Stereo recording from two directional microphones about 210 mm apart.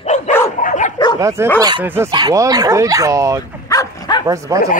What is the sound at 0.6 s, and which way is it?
Dog, 40° left (ahead or behind).